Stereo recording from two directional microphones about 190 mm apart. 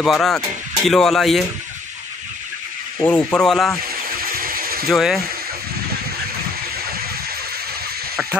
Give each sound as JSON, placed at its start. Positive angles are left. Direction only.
{"t": 0.0, "sound": "speech", "side_deg": 0}
{"t": 3.0, "sound": "speech", "side_deg": 10}
{"t": 3.8, "sound": "a sound", "side_deg": -50}
{"t": 4.8, "sound": "speech", "side_deg": 0}